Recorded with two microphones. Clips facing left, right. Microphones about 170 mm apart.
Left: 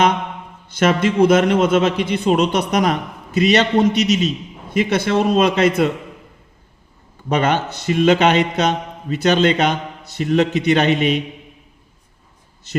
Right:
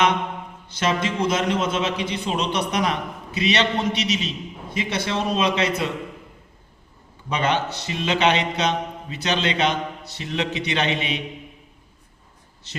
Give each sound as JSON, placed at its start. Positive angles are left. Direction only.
{"t": 0.7, "sound": "a man's voice", "side_deg": 55}
{"t": 7.3, "sound": "a man's voice", "side_deg": 50}
{"t": 12.7, "sound": "a man's voice", "side_deg": 50}